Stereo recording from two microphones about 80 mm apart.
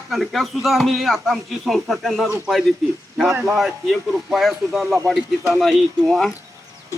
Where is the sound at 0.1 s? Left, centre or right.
Centre.